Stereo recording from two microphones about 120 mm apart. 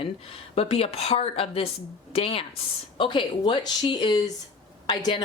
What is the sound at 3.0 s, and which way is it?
Speech, 40° left (ahead or behind).